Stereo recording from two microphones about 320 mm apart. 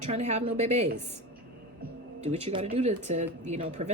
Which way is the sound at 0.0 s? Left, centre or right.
Right.